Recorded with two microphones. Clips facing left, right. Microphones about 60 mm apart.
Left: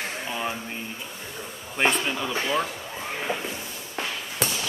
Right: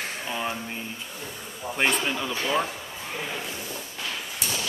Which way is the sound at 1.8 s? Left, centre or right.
Centre.